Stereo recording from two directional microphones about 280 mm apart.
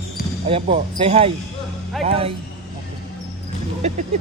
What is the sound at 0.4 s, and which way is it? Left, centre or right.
Speech, right.